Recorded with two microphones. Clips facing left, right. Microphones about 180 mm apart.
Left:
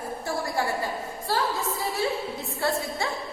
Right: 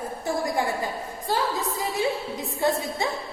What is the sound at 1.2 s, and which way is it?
A woman's voice, 15° right (ahead or behind).